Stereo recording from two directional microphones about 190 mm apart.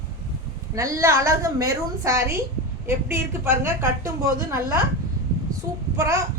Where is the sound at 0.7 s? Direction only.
15° right (ahead or behind).